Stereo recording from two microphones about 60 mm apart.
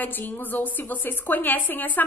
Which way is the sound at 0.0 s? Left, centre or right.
Left.